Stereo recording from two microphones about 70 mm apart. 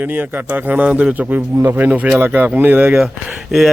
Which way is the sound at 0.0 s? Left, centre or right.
Right.